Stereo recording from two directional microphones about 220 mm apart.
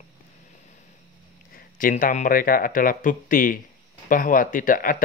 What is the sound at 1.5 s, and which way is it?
Speech, 40° left (ahead or behind).